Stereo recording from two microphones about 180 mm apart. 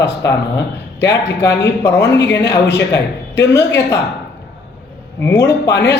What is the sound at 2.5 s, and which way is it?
A woman's voice, 70° left (ahead or behind).